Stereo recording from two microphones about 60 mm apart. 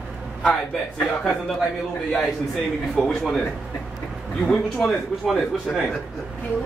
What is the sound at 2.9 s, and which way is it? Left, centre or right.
Speech, centre.